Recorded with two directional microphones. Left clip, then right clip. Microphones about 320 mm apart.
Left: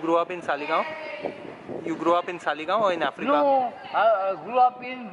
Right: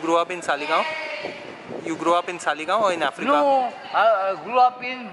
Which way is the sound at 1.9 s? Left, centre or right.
Centre.